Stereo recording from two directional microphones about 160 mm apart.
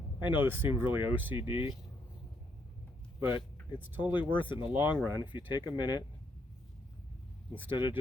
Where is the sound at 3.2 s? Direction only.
15° right (ahead or behind).